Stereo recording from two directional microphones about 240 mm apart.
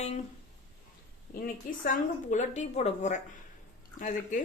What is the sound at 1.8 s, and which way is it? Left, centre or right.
A woman's voice, left.